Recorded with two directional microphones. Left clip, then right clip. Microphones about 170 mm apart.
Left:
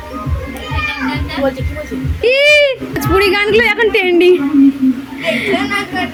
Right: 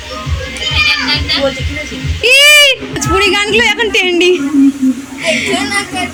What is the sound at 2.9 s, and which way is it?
A woman's voice, 10° left (ahead or behind).